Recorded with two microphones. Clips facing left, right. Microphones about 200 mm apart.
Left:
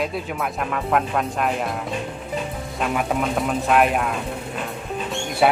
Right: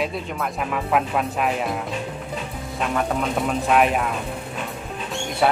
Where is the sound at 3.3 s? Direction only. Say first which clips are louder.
Even; centre (ahead or behind).